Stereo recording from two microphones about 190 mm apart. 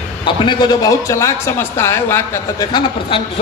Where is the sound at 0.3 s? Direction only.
25° left (ahead or behind).